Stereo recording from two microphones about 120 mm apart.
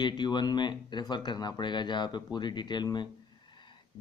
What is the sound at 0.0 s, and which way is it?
Speech, 40° left (ahead or behind).